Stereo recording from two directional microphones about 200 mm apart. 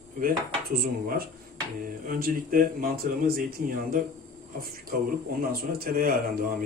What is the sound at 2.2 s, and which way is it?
Speech, 45° right (ahead or behind).